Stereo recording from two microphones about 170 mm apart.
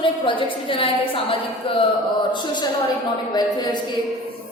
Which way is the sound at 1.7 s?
30° left (ahead or behind).